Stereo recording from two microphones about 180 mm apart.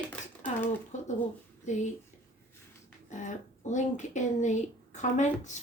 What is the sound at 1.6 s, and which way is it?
Speech, 40° left (ahead or behind).